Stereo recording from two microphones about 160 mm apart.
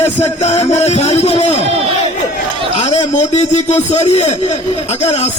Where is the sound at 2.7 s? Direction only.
45° left (ahead or behind).